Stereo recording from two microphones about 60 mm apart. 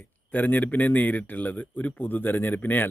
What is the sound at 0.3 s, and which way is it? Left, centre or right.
A man's voice, left.